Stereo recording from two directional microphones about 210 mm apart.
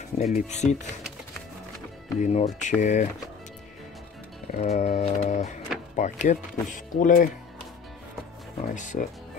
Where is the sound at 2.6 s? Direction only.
35° left (ahead or behind).